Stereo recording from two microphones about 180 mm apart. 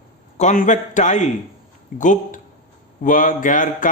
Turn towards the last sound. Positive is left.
turn(degrees=45)  # may be behind; listen again after turning